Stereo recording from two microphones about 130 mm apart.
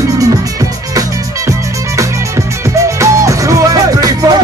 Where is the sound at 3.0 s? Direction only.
25° right (ahead or behind).